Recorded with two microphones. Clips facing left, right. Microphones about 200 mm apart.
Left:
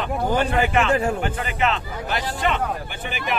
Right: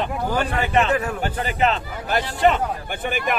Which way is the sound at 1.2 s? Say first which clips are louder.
Right 2 dB; 35° right (ahead or behind).